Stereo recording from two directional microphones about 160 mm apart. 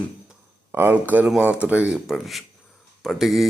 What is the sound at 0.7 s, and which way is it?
Speech, 10° right (ahead or behind).